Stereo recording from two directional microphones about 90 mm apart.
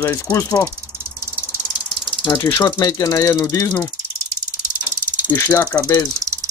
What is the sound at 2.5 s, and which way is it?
Mechanisms, 40° left (ahead or behind).